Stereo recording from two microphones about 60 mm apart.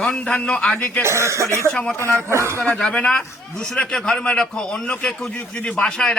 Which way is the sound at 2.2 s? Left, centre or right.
Right.